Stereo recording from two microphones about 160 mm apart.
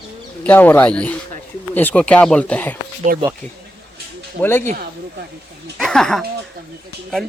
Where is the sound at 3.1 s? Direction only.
60° right (ahead or behind).